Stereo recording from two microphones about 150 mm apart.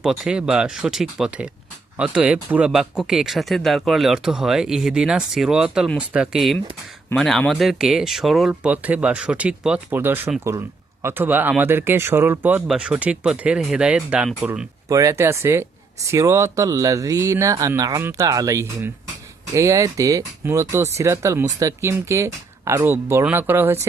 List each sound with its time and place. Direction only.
0.0 s speech: 5° right (ahead or behind)
14.8 s speech: 20° right (ahead or behind)